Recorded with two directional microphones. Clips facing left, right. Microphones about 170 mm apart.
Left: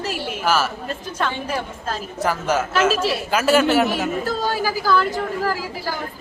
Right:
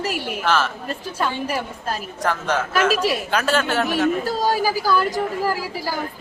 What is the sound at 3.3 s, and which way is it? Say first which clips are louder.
Speech: left 7 dB; 10° left (ahead or behind).